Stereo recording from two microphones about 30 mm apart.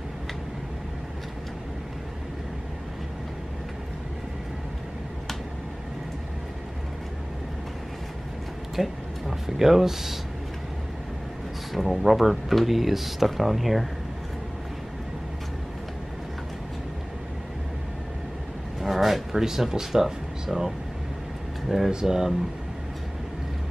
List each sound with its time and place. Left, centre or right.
8.8 s speech: right
9.6 s speech: centre
11.7 s speech: centre
18.8 s a sound: centre
19.4 s speech: centre